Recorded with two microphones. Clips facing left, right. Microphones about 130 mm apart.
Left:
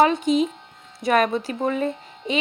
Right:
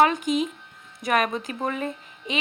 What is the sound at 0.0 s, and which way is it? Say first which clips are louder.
Mantra: left 3 dB; 30° left (ahead or behind).